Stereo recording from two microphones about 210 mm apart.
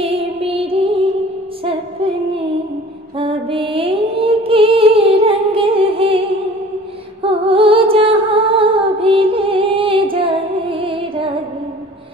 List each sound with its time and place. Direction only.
0.0 s music: 25° right (ahead or behind)
3.2 s music: 25° right (ahead or behind)
7.2 s music: 25° right (ahead or behind)